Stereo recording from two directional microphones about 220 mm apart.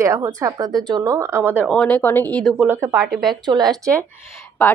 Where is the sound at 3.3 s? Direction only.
20° right (ahead or behind).